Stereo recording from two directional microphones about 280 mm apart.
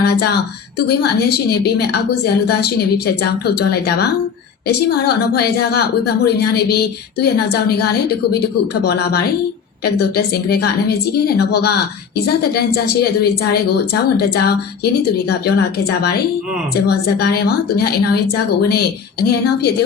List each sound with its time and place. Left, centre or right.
0.0 s a woman's voice: left